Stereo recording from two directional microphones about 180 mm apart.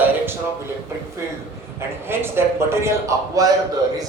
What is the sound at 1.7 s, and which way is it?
A man's voice, 15° right (ahead or behind).